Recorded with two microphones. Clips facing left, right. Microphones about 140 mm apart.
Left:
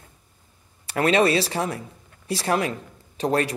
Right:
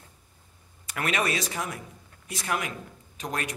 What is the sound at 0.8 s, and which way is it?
A man's voice, 30° left (ahead or behind).